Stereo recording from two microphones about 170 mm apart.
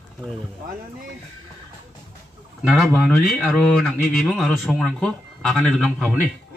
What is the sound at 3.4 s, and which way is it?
A man's voice, centre (ahead or behind).